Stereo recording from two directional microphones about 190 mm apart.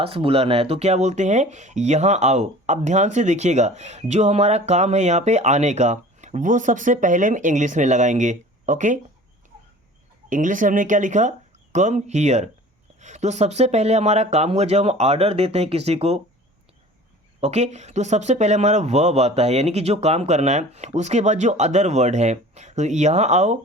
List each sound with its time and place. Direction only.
0.0 s speech: 30° right (ahead or behind)
10.2 s speech: 45° right (ahead or behind)
17.4 s speech: 35° right (ahead or behind)